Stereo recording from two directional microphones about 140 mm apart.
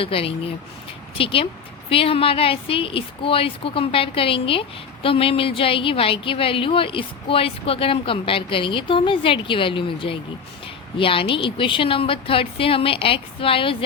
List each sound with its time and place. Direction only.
0.0 s a woman's voice: 40° left (ahead or behind)